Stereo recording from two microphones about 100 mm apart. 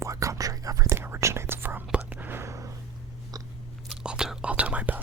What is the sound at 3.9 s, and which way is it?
Whispering, 10° right (ahead or behind).